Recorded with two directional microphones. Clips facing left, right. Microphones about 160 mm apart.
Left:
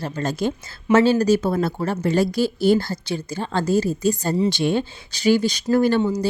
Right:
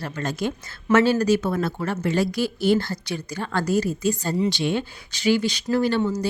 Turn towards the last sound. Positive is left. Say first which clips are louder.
# left 4 dB
turn(degrees=50)  # may be behind; listen again after turning